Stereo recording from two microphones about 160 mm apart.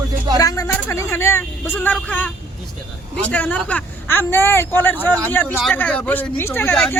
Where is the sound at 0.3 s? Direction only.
20° left (ahead or behind).